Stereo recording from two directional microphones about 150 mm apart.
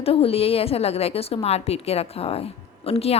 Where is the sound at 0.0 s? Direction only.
40° left (ahead or behind).